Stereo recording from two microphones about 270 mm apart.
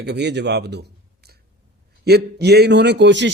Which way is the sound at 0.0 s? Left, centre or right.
Right.